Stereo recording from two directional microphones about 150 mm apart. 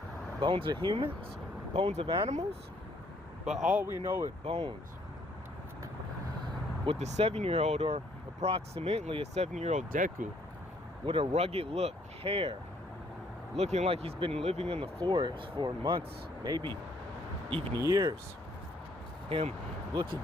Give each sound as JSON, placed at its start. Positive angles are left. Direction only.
{"t": 0.3, "sound": "speech", "side_deg": -35}
{"t": 1.7, "sound": "speech", "side_deg": -45}
{"t": 3.4, "sound": "speech", "side_deg": -5}
{"t": 4.4, "sound": "speech", "side_deg": -40}
{"t": 6.8, "sound": "speech", "side_deg": -45}
{"t": 11.0, "sound": "speech", "side_deg": -35}
{"t": 13.6, "sound": "speech", "side_deg": -45}
{"t": 17.7, "sound": "speech", "side_deg": -25}
{"t": 19.3, "sound": "speech", "side_deg": -45}
{"t": 19.9, "sound": "speech", "side_deg": -30}